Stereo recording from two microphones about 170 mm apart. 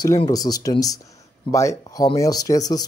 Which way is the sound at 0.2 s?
20° left (ahead or behind).